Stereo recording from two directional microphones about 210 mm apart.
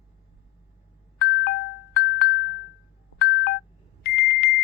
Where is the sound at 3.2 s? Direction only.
50° left (ahead or behind).